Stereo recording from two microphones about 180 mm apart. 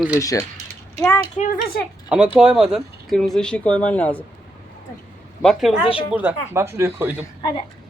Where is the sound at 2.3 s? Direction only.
5° right (ahead or behind).